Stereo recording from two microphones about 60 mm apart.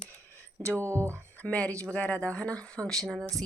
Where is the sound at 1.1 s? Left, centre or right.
Left.